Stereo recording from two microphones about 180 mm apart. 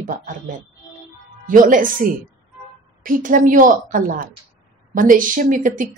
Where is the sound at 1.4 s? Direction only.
45° right (ahead or behind).